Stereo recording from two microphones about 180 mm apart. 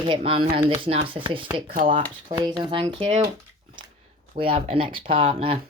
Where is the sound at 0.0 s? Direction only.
30° right (ahead or behind).